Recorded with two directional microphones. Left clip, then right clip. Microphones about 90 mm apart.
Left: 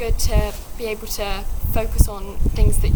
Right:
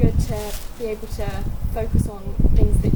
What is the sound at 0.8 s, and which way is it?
Speech, 25° left (ahead or behind).